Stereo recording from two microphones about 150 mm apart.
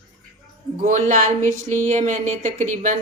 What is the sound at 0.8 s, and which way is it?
Speech, 60° right (ahead or behind).